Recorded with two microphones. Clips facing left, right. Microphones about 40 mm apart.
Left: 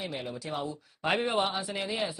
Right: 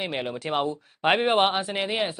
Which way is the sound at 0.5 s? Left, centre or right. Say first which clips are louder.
Right 11 dB; right.